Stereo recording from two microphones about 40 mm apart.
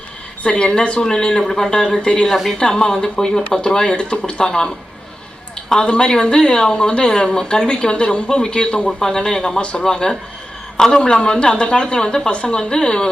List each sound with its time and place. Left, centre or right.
0.4 s speech: left; by 1.7 s centre
1.7 s speech: left
5.8 s a man's voice: left
11.1 s speech: left